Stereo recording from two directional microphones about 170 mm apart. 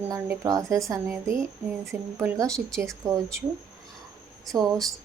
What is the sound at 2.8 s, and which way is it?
Speech, 20° right (ahead or behind).